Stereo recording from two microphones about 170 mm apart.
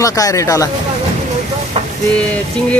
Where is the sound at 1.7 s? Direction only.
35° right (ahead or behind).